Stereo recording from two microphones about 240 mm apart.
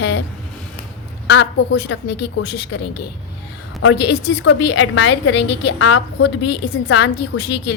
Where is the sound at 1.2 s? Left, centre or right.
Left.